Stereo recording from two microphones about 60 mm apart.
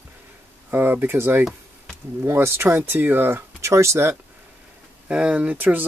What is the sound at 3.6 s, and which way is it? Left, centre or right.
Speech, right.